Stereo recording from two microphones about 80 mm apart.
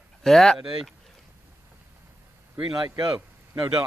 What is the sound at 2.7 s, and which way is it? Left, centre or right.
Speech, right.